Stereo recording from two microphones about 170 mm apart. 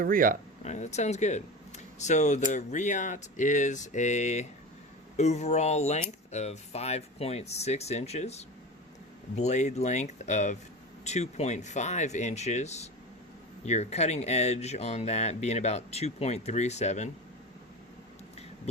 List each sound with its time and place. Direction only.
0.0 s speech: 55° right (ahead or behind)
0.6 s speech: 45° left (ahead or behind)